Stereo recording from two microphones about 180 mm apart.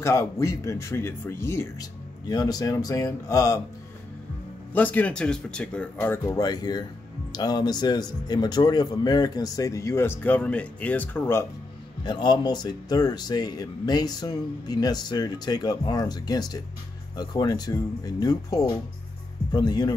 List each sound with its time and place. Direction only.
0.0 s speech: 15° left (ahead or behind)
4.7 s speech: 10° left (ahead or behind)
12.0 s speech: 25° left (ahead or behind)